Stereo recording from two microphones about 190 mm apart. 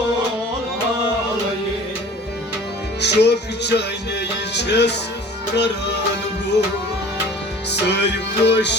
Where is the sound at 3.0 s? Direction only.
65° left (ahead or behind).